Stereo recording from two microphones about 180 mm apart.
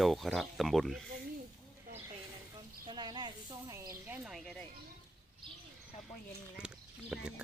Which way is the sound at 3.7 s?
15° right (ahead or behind).